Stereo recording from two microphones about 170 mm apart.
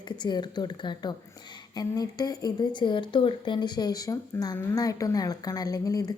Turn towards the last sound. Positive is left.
turn(degrees=20)  # may be behind; listen again after turning